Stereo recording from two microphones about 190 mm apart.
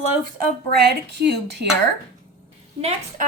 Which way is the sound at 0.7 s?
60° right (ahead or behind).